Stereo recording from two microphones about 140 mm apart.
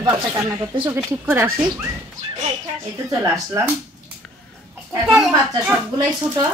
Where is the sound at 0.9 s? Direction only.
15° right (ahead or behind).